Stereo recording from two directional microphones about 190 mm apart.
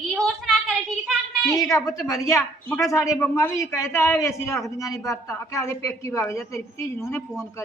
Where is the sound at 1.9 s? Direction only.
15° left (ahead or behind).